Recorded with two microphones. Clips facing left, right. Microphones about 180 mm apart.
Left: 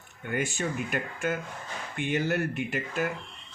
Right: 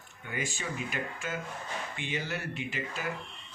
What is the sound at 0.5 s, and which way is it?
Speech, 55° left (ahead or behind).